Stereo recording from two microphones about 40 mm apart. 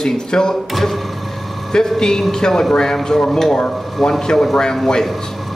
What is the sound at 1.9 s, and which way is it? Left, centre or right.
Speech, centre.